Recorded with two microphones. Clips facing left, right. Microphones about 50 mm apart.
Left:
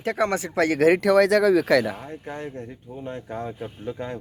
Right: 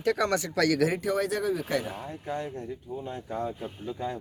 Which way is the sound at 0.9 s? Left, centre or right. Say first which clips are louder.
Left 11 dB; left.